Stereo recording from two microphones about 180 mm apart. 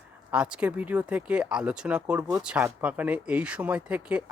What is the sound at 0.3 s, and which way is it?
Speech, 5° right (ahead or behind).